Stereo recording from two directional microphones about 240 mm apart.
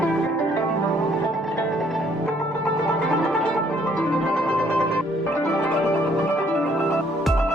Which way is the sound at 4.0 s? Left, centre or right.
Centre.